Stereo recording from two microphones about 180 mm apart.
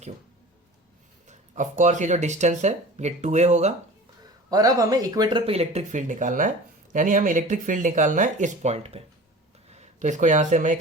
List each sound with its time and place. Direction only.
1.3 s speech: 40° right (ahead or behind)
4.4 s speech: 20° right (ahead or behind); by 10.8 s 45° right (ahead or behind)